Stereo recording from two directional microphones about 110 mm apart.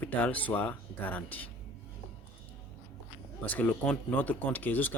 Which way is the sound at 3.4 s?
15° left (ahead or behind).